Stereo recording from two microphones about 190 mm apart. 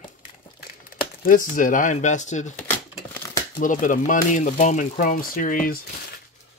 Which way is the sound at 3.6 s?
45° left (ahead or behind).